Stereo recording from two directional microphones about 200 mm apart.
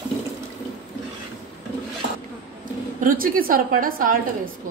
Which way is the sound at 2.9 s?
45° right (ahead or behind).